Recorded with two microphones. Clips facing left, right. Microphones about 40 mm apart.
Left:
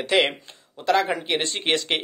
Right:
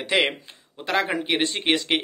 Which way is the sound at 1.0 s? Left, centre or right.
Centre.